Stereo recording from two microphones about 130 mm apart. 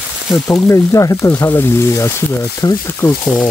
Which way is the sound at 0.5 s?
25° left (ahead or behind).